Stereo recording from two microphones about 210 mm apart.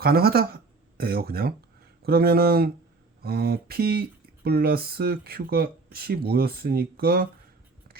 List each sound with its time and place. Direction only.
0.0 s speech: 45° right (ahead or behind)